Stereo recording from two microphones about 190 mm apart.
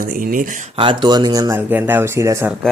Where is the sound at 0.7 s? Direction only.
25° right (ahead or behind).